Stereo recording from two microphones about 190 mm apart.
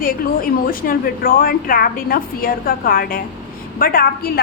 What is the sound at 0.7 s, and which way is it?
A woman's voice, 50° left (ahead or behind).